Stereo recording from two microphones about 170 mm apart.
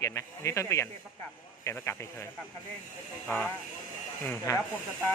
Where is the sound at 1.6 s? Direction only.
15° left (ahead or behind).